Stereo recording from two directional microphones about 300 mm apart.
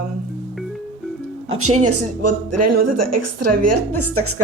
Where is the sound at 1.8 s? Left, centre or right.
Right.